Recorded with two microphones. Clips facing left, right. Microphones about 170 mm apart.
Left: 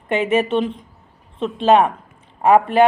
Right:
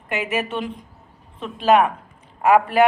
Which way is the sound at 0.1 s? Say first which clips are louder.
Left 7 dB; 25° left (ahead or behind).